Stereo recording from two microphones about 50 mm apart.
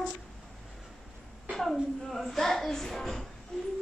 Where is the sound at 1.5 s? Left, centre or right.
Centre.